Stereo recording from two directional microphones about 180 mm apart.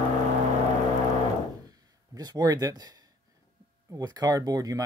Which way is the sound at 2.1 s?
20° right (ahead or behind).